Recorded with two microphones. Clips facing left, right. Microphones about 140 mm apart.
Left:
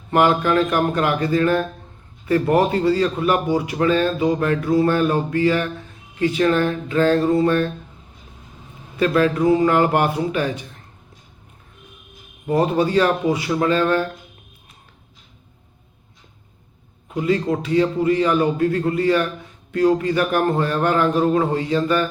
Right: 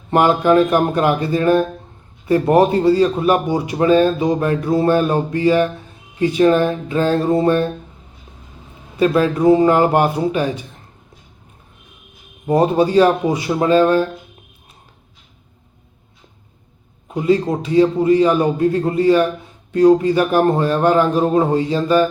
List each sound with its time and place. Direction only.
0.1 s speech: 25° right (ahead or behind)
9.0 s speech: 20° right (ahead or behind)
9.4 s speech: 30° right (ahead or behind)
12.5 s speech: 30° right (ahead or behind)
17.1 s a man's voice: 30° right (ahead or behind)
19.0 s speech: 20° right (ahead or behind)
21.8 s mantra: 10° right (ahead or behind)